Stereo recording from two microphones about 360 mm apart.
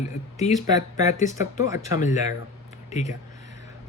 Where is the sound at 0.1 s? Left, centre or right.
Centre.